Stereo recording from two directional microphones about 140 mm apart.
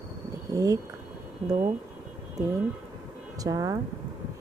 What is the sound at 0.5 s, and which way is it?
Speech, 25° right (ahead or behind).